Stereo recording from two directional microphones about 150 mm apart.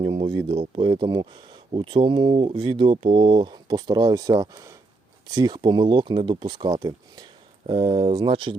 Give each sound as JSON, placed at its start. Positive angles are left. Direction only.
{"t": 0.0, "sound": "speech", "side_deg": -35}